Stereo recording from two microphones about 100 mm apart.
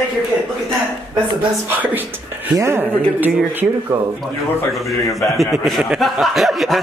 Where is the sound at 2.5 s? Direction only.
25° right (ahead or behind).